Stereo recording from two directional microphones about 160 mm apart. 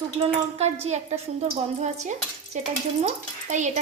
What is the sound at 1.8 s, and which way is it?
Stir, 45° right (ahead or behind).